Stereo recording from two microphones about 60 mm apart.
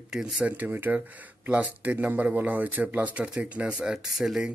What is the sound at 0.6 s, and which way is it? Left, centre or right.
Speech, right.